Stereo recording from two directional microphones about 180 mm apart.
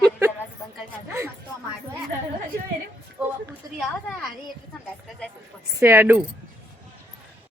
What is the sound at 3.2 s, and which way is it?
Speech, 5° right (ahead or behind).